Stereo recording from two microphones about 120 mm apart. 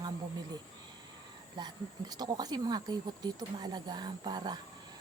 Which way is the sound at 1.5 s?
35° right (ahead or behind).